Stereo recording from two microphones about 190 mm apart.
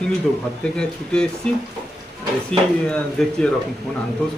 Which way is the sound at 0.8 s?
5° left (ahead or behind).